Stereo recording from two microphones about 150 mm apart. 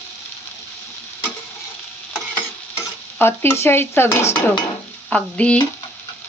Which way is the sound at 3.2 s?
15° left (ahead or behind).